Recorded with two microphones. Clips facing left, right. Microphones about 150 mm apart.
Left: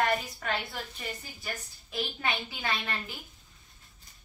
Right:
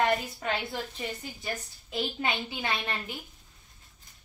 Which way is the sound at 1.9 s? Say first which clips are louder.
Right 2 dB; 25° right (ahead or behind).